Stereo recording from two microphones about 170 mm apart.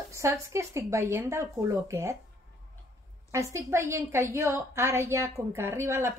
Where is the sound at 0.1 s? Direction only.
15° right (ahead or behind).